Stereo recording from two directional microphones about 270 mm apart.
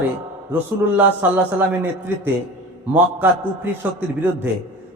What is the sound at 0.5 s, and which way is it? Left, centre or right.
A man's voice, centre.